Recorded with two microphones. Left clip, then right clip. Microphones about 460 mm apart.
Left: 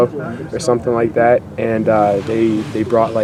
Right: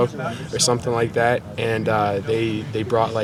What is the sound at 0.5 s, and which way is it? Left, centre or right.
Speech, right.